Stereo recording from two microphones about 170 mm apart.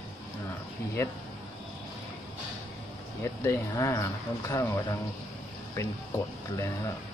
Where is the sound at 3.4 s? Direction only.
20° left (ahead or behind).